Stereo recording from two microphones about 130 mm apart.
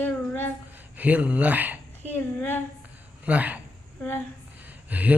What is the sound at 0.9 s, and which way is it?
Gasp, 10° right (ahead or behind).